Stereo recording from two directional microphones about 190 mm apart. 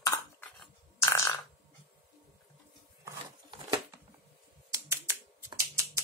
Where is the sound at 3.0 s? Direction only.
25° right (ahead or behind).